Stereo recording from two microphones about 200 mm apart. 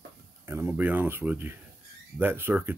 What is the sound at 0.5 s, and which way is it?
Speech, 15° right (ahead or behind).